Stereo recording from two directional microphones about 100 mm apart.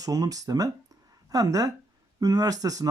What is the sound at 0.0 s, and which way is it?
Speech, 35° right (ahead or behind).